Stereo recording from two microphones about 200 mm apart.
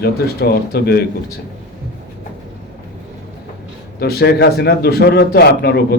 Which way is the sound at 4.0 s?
50° left (ahead or behind).